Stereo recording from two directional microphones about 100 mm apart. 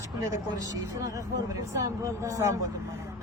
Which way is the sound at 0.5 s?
35° right (ahead or behind).